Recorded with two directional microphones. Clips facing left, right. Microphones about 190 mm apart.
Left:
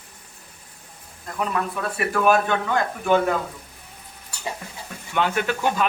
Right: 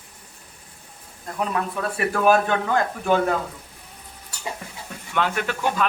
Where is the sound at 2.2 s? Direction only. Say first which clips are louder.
Right 1 dB; 40° right (ahead or behind).